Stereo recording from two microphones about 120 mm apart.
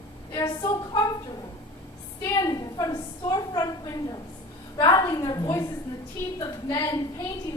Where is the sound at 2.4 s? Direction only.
30° left (ahead or behind).